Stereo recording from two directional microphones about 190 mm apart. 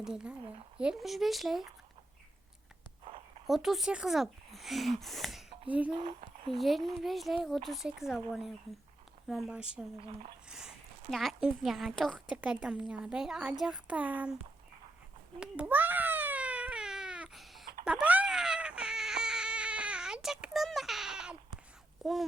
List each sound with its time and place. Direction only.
0.0 s speech: 5° right (ahead or behind)
3.0 s a sound: 30° right (ahead or behind)
3.4 s speech: centre (ahead or behind)
5.9 s speech: 30° right (ahead or behind)
6.6 s speech: centre (ahead or behind)
11.1 s speech: centre (ahead or behind)
15.4 s a sound: 5° right (ahead or behind)
17.8 s baby cry: 5° right (ahead or behind)
22.0 s speech: centre (ahead or behind)